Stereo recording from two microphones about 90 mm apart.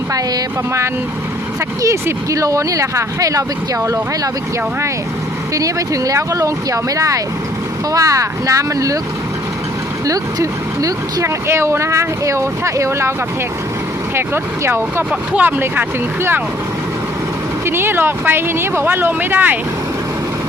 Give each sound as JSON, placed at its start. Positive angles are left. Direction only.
{"t": 1.8, "sound": "speech", "side_deg": -35}
{"t": 5.5, "sound": "speech", "side_deg": -40}
{"t": 10.1, "sound": "speech", "side_deg": -40}
{"t": 14.2, "sound": "speech", "side_deg": -25}
{"t": 15.1, "sound": "speech", "side_deg": -15}
{"t": 17.7, "sound": "speech", "side_deg": -25}